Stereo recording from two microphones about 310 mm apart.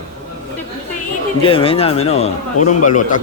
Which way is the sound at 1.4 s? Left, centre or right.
Centre.